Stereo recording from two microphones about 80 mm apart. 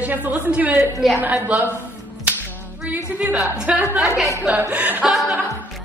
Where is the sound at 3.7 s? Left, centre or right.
Centre.